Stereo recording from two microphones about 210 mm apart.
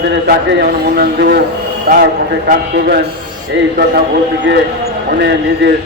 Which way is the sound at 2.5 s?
50° right (ahead or behind).